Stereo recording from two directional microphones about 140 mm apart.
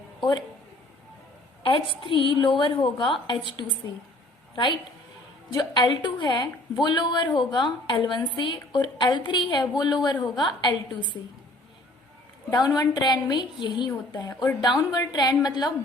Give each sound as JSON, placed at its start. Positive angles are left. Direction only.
{"t": 0.2, "sound": "speech", "side_deg": 30}
{"t": 1.6, "sound": "a woman's voice", "side_deg": 40}
{"t": 12.5, "sound": "a woman's voice", "side_deg": 25}